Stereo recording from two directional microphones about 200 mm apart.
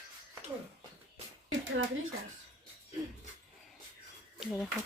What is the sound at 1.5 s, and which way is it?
Speech, 75° right (ahead or behind).